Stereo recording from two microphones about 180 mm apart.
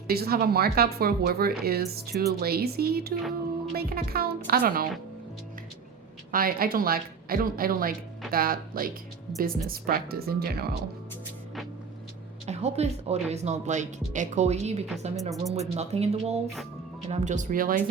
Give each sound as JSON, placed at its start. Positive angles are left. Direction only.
{"t": 0.1, "sound": "speech", "side_deg": -60}
{"t": 6.3, "sound": "a woman's voice", "side_deg": -55}
{"t": 12.5, "sound": "speech", "side_deg": -35}
{"t": 15.1, "sound": "speech", "side_deg": 0}
{"t": 15.7, "sound": "a woman's voice", "side_deg": -35}